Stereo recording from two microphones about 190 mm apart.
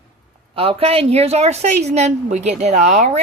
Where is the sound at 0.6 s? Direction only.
30° right (ahead or behind).